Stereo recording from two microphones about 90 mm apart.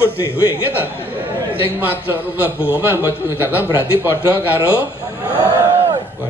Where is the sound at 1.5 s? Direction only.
20° right (ahead or behind).